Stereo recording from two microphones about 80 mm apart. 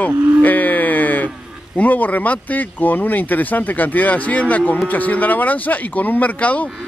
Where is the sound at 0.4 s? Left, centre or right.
Left.